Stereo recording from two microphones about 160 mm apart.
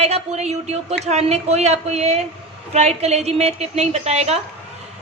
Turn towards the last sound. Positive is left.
turn(degrees=-40)  # may be behind; listen again after turning